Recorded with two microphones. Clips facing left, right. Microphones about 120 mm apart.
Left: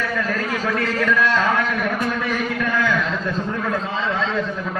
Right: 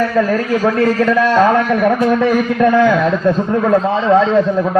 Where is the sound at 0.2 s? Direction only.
40° right (ahead or behind).